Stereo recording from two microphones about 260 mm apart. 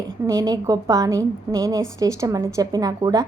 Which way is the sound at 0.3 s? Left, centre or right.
Centre.